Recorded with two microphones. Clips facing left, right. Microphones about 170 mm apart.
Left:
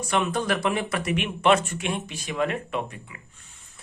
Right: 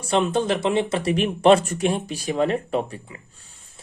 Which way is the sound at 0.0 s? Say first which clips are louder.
Right 4 dB; 30° right (ahead or behind).